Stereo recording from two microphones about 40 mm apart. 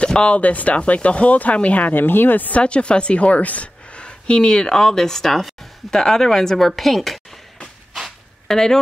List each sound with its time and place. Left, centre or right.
0.0 s a sound: left
0.4 s speech: left
2.0 s speech: left
2.5 s a woman's voice: left; by 7.2 s centre
8.5 s speech: centre